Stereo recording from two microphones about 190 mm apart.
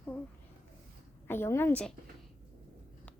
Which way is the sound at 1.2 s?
10° left (ahead or behind).